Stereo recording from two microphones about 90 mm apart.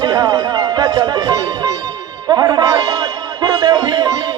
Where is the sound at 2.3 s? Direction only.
45° right (ahead or behind).